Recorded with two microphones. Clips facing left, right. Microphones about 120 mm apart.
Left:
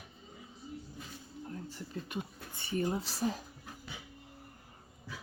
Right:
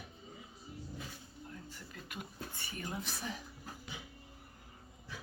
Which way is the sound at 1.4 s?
35° left (ahead or behind).